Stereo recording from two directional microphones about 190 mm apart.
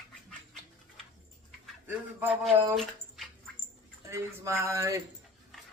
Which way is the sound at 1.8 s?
10° right (ahead or behind).